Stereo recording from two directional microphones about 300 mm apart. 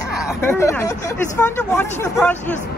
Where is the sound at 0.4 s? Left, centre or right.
Centre.